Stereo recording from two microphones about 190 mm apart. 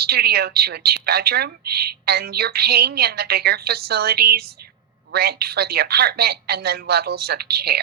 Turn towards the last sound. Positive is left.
turn(degrees=-55)  # may be behind; listen again after turning